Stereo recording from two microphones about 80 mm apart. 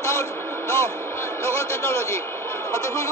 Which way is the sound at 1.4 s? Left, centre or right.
Left.